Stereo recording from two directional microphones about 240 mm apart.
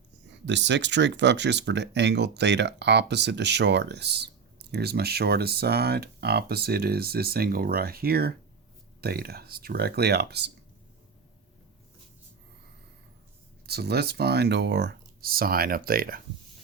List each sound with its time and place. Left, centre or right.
0.4 s speech: right
13.7 s speech: right